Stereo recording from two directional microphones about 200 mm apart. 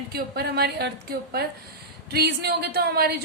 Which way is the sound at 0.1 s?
50° right (ahead or behind).